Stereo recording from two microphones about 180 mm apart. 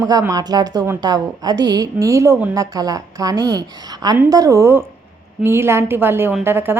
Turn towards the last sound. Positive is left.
turn(degrees=-10)  # may be behind; listen again after turning